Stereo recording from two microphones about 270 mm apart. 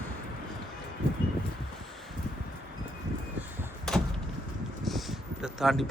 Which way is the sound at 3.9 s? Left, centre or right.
Centre.